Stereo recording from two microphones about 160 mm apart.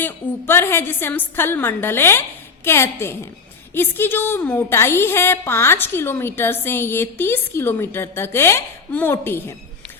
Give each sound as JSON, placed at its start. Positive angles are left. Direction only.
{"t": 0.0, "sound": "a woman's voice", "side_deg": 15}